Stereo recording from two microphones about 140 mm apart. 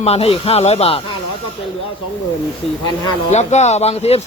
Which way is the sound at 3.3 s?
55° left (ahead or behind).